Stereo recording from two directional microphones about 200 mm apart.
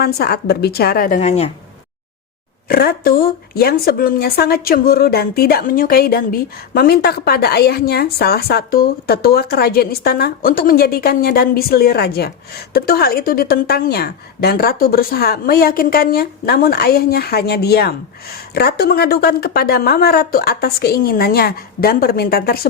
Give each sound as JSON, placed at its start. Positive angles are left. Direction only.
{"t": 0.0, "sound": "a woman's voice", "side_deg": 50}
{"t": 2.6, "sound": "a woman's voice", "side_deg": 50}